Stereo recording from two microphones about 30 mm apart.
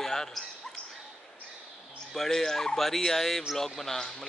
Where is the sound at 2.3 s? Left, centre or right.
Centre.